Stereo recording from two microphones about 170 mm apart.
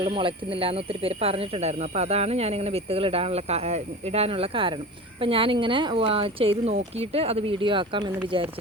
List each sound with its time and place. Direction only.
0.0 s speech: 30° right (ahead or behind)